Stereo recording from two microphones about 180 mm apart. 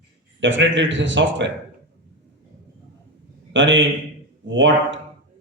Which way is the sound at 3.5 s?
90° right.